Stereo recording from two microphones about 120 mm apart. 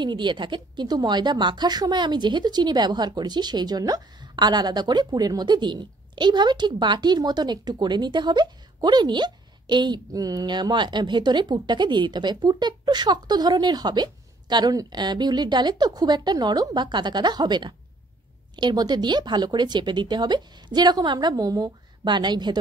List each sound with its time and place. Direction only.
0.0 s speech: 40° right (ahead or behind)